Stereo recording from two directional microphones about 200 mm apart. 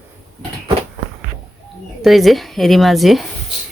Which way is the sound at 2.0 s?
Centre (ahead or behind).